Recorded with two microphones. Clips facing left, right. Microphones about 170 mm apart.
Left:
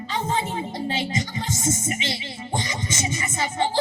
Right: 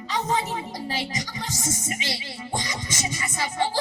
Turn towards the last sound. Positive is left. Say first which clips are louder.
# left 2 dB
turn(degrees=25)  # may be behind; listen again after turning